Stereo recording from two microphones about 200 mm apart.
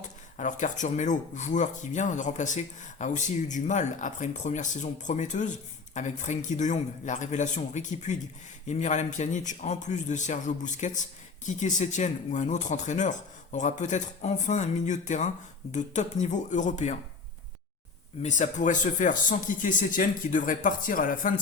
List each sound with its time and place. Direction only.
0.3 s speech: 35° left (ahead or behind)
18.2 s speech: 35° left (ahead or behind)